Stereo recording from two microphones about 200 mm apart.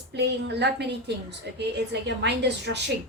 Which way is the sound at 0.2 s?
55° right (ahead or behind).